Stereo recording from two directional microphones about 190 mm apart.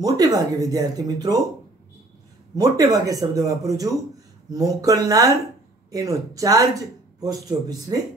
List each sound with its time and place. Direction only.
0.0 s speech: 20° right (ahead or behind)
2.5 s speech: 20° right (ahead or behind)